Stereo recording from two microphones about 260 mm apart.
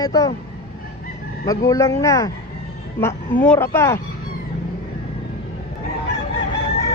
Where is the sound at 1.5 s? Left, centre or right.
Centre.